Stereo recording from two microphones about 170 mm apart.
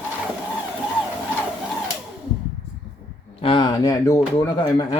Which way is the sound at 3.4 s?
30° left (ahead or behind).